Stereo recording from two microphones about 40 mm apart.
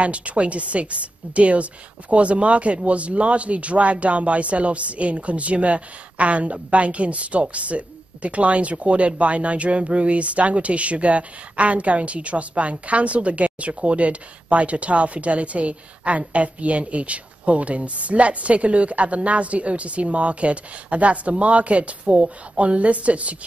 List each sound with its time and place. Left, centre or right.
0.0 s a woman's voice: right